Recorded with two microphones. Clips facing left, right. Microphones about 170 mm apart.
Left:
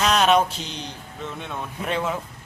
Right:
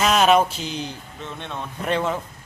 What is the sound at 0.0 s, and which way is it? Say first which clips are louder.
Speech: right 2 dB; 5° right (ahead or behind).